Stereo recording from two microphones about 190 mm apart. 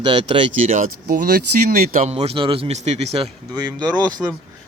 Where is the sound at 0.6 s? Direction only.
45° right (ahead or behind).